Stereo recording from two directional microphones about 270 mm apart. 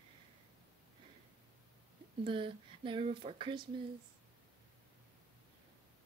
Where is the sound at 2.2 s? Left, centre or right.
Centre.